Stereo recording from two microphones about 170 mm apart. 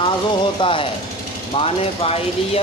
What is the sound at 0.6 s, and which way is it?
Speech, 30° left (ahead or behind).